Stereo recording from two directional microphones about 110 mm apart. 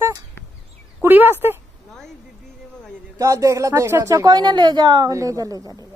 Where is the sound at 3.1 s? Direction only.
30° right (ahead or behind).